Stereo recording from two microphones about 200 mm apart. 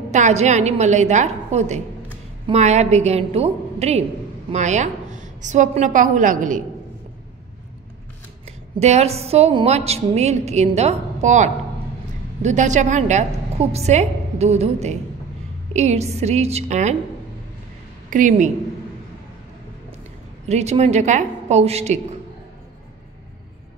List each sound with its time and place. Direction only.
0.1 s a woman's voice: 35° right (ahead or behind)
8.7 s a woman's voice: 35° right (ahead or behind)
18.1 s a woman's voice: 40° right (ahead or behind)
20.4 s a woman's voice: 35° right (ahead or behind)